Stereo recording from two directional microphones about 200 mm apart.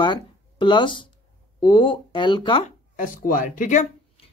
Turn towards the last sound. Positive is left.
turn(degrees=35)  # may be behind; listen again after turning